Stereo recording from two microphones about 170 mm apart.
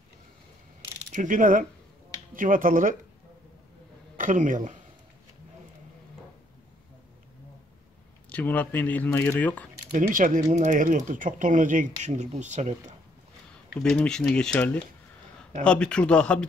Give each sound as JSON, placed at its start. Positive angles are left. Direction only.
{"t": 1.1, "sound": "speech", "side_deg": -50}
{"t": 4.2, "sound": "speech", "side_deg": -50}
{"t": 8.3, "sound": "speech", "side_deg": 10}
{"t": 10.1, "sound": "speech", "side_deg": -50}
{"t": 13.8, "sound": "speech", "side_deg": 5}